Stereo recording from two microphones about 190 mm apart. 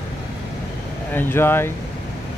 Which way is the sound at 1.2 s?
10° left (ahead or behind).